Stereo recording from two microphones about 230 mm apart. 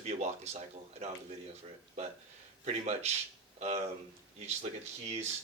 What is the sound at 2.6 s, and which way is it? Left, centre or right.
Speech, right.